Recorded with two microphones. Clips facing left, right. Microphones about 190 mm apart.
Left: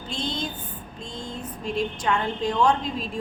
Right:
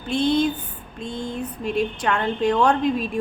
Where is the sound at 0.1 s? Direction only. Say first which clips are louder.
Right 12 dB; 60° right (ahead or behind).